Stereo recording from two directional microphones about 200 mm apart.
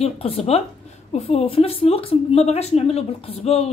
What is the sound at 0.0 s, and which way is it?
A woman's voice, 30° left (ahead or behind).